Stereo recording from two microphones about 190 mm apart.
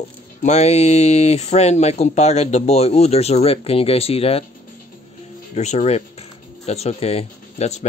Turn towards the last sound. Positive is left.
turn(degrees=35)  # may be behind; listen again after turning